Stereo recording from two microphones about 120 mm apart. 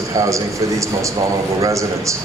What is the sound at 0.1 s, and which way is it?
A man's voice, 25° right (ahead or behind).